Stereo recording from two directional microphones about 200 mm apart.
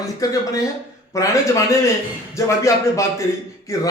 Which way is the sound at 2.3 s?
15° left (ahead or behind).